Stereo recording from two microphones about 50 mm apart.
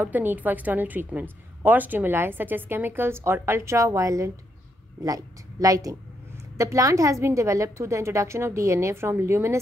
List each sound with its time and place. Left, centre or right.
0.0 s a woman's voice: right
6.5 s a woman's voice: right